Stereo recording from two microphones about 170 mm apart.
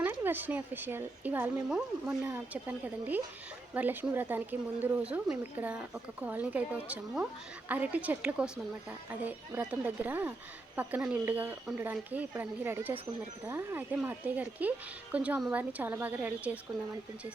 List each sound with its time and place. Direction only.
0.0 s speech: 10° right (ahead or behind)